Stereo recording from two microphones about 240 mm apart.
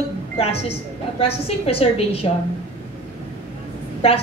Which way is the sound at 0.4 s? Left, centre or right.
Left.